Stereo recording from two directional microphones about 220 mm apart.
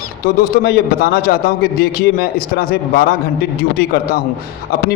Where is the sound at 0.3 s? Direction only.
45° left (ahead or behind).